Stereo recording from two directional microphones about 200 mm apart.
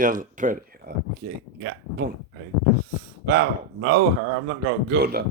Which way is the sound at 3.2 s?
55° right (ahead or behind).